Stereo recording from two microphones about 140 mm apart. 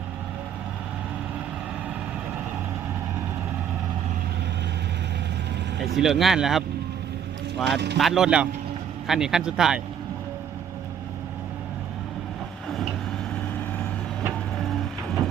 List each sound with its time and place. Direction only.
6.0 s speech: centre (ahead or behind)
7.7 s speech: centre (ahead or behind)